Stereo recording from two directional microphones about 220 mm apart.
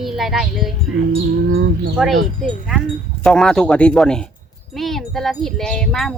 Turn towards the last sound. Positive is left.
turn(degrees=5)  # may be behind; listen again after turning